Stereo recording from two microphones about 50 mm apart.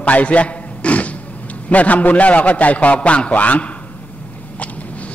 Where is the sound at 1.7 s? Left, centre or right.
Left.